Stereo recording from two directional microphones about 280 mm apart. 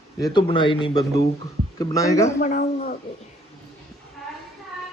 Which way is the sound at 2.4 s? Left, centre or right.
Left.